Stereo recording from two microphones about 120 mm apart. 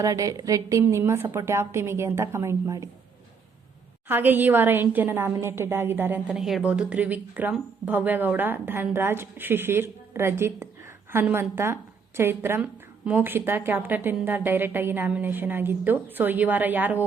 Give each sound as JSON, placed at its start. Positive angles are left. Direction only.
{"t": 0.0, "sound": "a woman's voice", "side_deg": -30}
{"t": 4.1, "sound": "a woman's voice", "side_deg": -15}
{"t": 6.2, "sound": "a woman's voice", "side_deg": -5}